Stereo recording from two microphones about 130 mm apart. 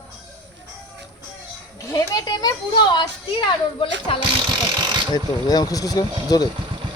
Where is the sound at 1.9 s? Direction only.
30° left (ahead or behind).